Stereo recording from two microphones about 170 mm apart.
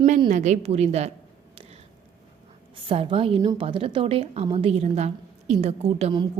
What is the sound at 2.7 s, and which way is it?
A woman's voice, 30° right (ahead or behind).